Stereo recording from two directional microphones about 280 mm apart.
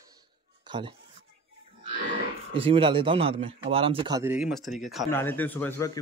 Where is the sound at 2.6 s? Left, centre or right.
Centre.